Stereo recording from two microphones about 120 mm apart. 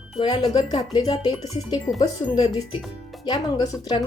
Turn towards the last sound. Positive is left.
turn(degrees=35)  # may be behind; listen again after turning